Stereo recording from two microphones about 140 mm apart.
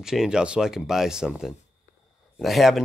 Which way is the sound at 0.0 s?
5° right (ahead or behind).